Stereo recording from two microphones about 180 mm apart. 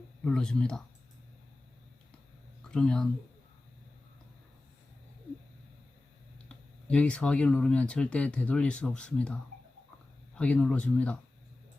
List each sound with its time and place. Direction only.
0.3 s speech: 5° left (ahead or behind)
2.6 s speech: 5° left (ahead or behind)
6.5 s speech: 5° left (ahead or behind)